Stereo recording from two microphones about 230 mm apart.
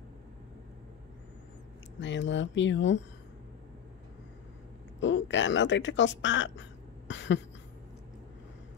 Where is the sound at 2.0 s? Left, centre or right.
Left.